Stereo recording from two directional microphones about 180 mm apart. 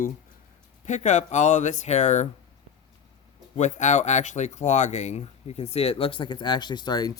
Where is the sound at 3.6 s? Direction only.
40° left (ahead or behind).